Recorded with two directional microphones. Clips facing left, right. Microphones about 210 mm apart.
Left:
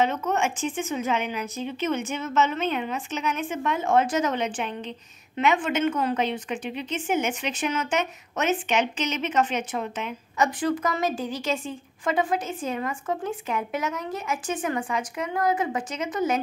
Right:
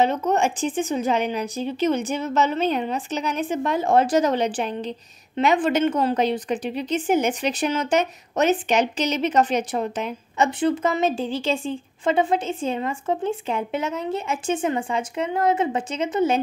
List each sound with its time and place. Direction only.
0.0 s a woman's voice: 35° right (ahead or behind)